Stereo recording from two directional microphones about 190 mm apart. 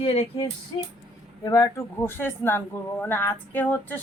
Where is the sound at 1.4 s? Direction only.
20° left (ahead or behind).